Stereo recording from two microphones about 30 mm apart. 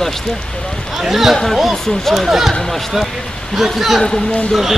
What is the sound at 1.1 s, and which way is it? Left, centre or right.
Speech, centre.